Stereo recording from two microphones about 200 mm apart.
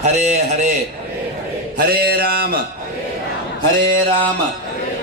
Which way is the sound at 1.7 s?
50° right (ahead or behind).